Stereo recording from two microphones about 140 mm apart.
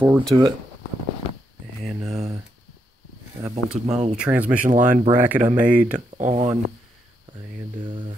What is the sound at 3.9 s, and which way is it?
Speech, 50° right (ahead or behind).